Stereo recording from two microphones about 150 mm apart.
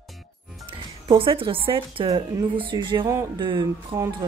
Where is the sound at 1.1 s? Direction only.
35° right (ahead or behind).